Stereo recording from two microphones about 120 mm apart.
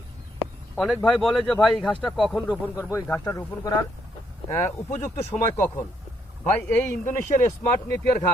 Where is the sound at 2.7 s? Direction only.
25° left (ahead or behind).